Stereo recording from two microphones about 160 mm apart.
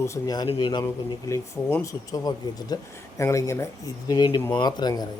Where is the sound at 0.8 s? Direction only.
20° left (ahead or behind).